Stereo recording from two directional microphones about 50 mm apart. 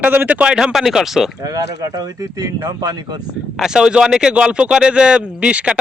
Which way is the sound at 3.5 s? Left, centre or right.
Centre.